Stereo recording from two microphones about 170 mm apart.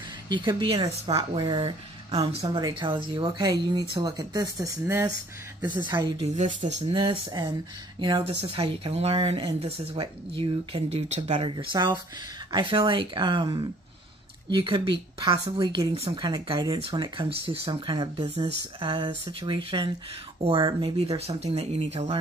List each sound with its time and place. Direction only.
0.3 s speech: 25° right (ahead or behind)
6.2 s speech: 45° right (ahead or behind)
6.9 s speech: 30° right (ahead or behind)